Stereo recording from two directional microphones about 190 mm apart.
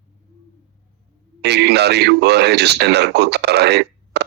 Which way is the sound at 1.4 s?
60° right (ahead or behind).